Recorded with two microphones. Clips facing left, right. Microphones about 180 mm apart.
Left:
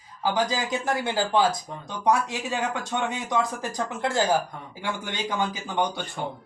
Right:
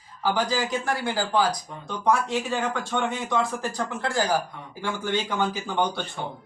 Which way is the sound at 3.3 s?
15° left (ahead or behind).